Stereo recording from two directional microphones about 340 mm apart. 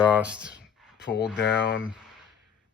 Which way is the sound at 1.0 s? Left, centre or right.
Left.